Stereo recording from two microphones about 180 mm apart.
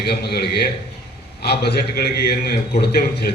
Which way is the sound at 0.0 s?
65° left (ahead or behind).